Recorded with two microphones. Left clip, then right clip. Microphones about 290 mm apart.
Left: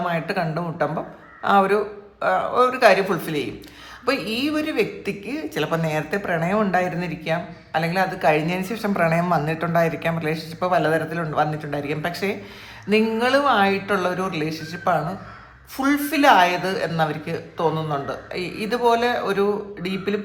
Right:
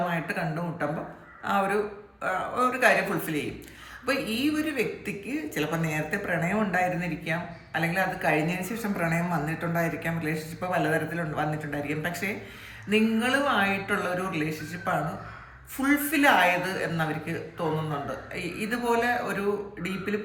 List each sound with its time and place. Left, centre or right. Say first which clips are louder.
0.1 s a woman's voice: left 6 dB; centre